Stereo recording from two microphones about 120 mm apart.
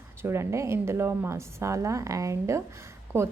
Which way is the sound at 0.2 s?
20° right (ahead or behind).